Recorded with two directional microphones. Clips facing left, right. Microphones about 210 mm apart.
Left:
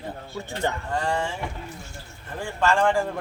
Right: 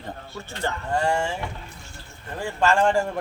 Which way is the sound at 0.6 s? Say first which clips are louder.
Left 1 dB; 15° left (ahead or behind).